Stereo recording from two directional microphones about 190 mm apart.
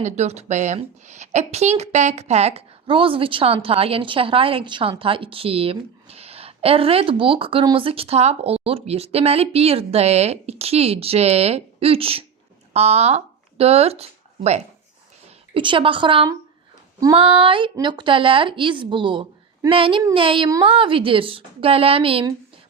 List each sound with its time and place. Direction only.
0.0 s a woman's voice: 35° right (ahead or behind)